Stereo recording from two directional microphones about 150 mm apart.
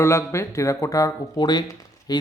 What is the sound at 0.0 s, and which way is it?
Speech, 20° left (ahead or behind).